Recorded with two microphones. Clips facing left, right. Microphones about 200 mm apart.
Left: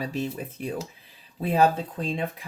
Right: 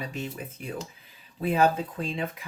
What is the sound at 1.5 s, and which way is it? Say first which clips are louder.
Speech: left 2 dB; 35° left (ahead or behind).